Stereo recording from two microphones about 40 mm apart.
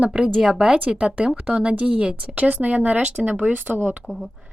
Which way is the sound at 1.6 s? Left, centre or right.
Right.